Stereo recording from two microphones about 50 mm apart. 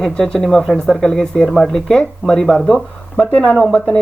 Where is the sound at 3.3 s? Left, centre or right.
Left.